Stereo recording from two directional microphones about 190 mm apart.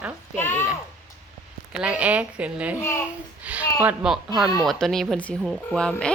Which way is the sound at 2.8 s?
15° left (ahead or behind).